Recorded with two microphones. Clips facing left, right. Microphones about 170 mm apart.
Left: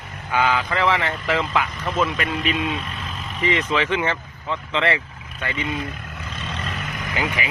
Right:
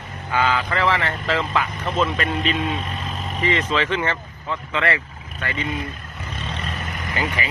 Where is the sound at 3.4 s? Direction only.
15° left (ahead or behind).